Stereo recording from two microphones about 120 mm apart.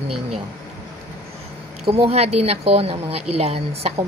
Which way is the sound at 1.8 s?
50° right (ahead or behind).